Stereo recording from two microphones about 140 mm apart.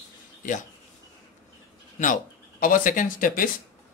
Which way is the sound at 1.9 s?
65° left (ahead or behind).